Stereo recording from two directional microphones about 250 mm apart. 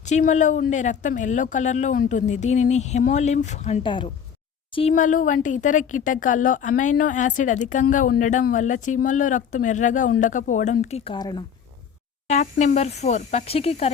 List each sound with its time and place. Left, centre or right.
0.0 s speech: left
12.3 s speech: left